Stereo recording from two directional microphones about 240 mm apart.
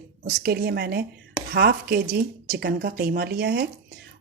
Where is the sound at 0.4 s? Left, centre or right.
Right.